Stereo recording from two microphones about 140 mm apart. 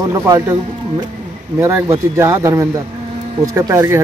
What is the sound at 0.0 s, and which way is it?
Speech, 25° right (ahead or behind).